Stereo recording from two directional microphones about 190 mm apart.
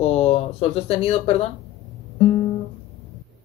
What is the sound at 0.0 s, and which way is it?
Speech, 30° left (ahead or behind).